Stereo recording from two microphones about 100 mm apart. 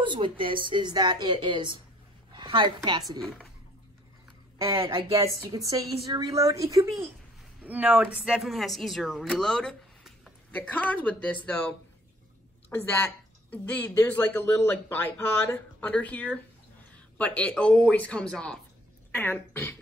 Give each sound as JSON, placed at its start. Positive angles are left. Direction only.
{"t": 0.0, "sound": "a woman's voice", "side_deg": -55}
{"t": 3.2, "sound": "speech", "side_deg": 5}
{"t": 5.5, "sound": "a woman's voice", "side_deg": -35}
{"t": 7.6, "sound": "speech", "side_deg": -15}
{"t": 8.4, "sound": "a woman's voice", "side_deg": 0}
{"t": 13.9, "sound": "speech", "side_deg": 25}
{"t": 15.9, "sound": "speech", "side_deg": 15}